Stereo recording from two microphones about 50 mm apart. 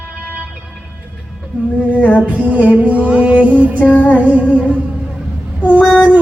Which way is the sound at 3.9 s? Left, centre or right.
Left.